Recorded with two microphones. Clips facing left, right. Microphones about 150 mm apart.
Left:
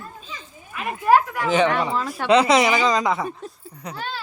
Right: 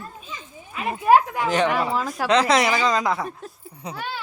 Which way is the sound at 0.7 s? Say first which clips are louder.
Right 1 dB; 20° right (ahead or behind).